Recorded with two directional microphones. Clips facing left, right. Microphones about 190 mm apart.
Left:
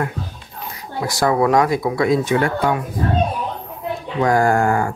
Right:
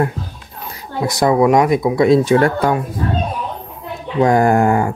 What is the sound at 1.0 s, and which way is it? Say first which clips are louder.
Speech: right 4 dB; 20° right (ahead or behind).